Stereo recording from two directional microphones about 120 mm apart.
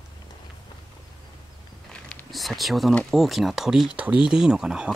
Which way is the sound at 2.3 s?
Centre (ahead or behind).